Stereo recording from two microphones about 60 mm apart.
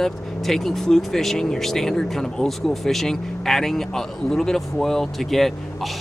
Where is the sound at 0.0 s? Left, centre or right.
Centre.